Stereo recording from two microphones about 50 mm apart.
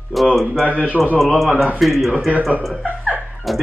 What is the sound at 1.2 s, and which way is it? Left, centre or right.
Speech, centre.